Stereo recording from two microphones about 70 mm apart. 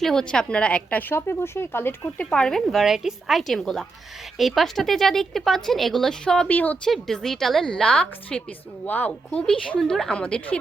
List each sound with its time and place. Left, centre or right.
0.0 s a woman's voice: centre; by 2.0 s left
2.1 s speech: centre
6.5 s a woman's voice: left
6.8 s a woman's voice: centre
9.7 s a woman's voice: centre